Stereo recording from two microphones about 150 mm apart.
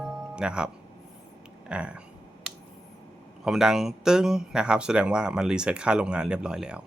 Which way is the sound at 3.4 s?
5° right (ahead or behind).